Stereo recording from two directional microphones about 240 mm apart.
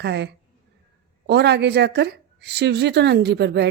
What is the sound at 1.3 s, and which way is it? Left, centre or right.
Speech, right.